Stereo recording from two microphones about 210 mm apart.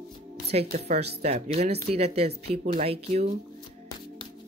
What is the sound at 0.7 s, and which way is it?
Speech, 45° right (ahead or behind).